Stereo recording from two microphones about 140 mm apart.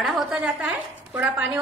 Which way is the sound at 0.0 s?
5° right (ahead or behind).